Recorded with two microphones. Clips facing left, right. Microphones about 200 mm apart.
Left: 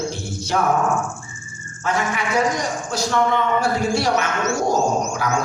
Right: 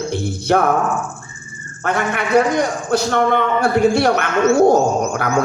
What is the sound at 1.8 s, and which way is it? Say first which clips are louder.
A man's voice: right 3 dB; 60° right (ahead or behind).